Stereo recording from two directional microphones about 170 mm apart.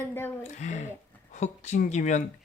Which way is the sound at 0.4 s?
40° left (ahead or behind).